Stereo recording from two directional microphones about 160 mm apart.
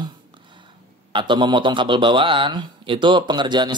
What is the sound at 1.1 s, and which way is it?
Speech, 30° right (ahead or behind).